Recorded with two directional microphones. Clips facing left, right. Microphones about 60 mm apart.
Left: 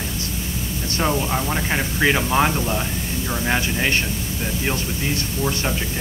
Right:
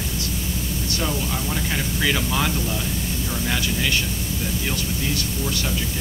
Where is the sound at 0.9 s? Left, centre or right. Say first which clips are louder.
Left 6 dB; left.